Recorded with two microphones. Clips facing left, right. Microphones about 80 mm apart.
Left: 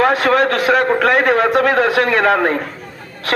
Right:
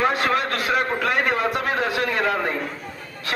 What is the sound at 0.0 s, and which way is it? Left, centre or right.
A man's voice, left.